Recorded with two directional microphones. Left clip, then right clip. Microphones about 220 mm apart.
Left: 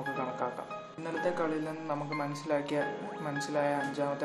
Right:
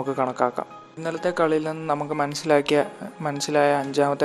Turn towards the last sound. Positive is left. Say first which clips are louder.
# right 11 dB
turn(degrees=-40)  # may be behind; listen again after turning